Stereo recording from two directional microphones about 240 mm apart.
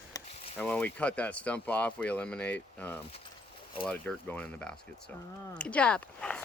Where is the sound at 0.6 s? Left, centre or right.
Centre.